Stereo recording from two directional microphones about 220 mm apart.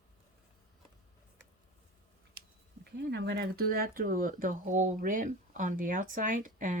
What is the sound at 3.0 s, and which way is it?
Speech, 50° right (ahead or behind).